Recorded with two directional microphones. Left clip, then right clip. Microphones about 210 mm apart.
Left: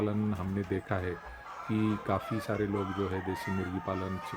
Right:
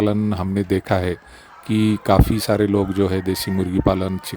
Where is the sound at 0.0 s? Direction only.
55° right (ahead or behind).